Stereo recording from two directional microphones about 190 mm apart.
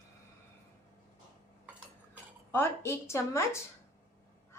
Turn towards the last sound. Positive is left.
turn(degrees=15)  # may be behind; listen again after turning